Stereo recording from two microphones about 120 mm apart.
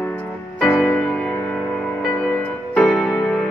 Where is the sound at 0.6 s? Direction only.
15° left (ahead or behind).